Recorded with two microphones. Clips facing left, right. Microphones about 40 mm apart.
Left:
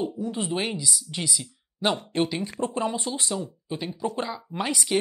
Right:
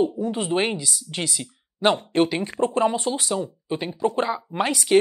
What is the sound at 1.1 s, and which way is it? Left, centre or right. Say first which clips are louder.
Speech: right 2 dB; right.